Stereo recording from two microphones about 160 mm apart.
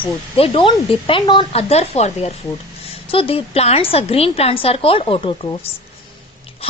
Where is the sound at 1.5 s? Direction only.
40° left (ahead or behind).